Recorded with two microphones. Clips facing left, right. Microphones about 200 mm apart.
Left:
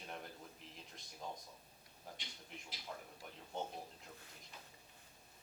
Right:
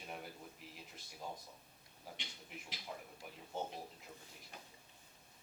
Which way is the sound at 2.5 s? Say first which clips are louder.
Right 1 dB; 5° right (ahead or behind).